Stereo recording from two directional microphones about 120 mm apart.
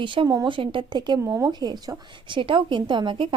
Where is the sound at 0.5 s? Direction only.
45° right (ahead or behind).